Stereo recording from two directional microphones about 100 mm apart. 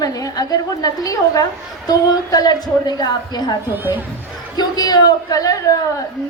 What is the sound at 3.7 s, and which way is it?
Speech, 20° right (ahead or behind).